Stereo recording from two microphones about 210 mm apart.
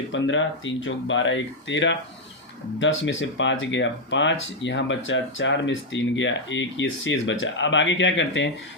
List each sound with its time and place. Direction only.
0.1 s speech: 65° left (ahead or behind)